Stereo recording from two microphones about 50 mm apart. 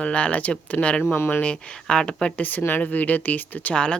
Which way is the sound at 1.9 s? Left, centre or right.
Centre.